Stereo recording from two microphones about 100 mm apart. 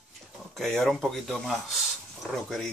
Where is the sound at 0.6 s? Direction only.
5° left (ahead or behind).